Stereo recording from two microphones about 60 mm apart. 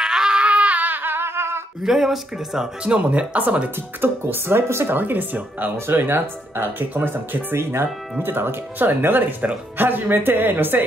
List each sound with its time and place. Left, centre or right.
0.0 s a sound: centre; by 1.6 s right
1.8 s speech: centre; by 4.9 s right
4.9 s speech: right